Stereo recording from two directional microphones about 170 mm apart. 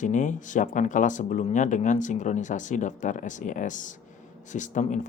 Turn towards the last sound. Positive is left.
turn(degrees=45)  # may be behind; listen again after turning